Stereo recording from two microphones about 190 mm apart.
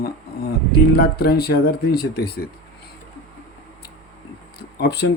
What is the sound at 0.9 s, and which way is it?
Speech, 55° left (ahead or behind).